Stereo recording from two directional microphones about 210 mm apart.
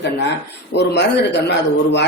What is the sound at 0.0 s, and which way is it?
Speech, 55° left (ahead or behind).